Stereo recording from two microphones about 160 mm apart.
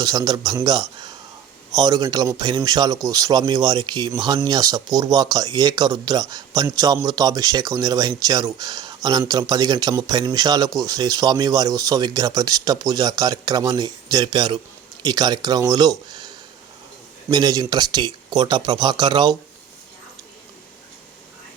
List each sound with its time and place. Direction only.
0.0 s a man's voice: 25° right (ahead or behind)